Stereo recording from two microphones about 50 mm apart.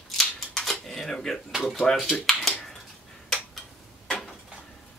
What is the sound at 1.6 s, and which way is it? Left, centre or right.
Speech, centre.